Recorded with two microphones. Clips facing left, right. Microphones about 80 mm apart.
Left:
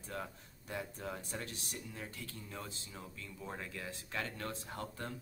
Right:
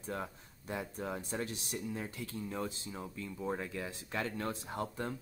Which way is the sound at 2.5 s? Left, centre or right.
Right.